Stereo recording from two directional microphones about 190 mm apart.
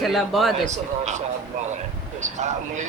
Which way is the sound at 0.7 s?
40° right (ahead or behind).